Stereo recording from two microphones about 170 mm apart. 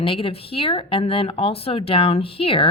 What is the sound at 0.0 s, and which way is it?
A woman's voice, 30° left (ahead or behind).